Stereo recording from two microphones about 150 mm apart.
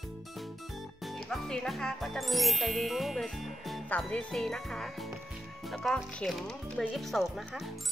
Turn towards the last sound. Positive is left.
turn(degrees=0)  # may be behind; listen again after turning